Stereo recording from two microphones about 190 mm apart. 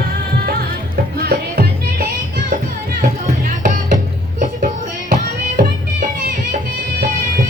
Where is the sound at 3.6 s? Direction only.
40° right (ahead or behind).